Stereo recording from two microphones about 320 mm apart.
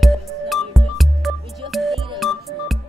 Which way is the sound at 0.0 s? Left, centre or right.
Centre.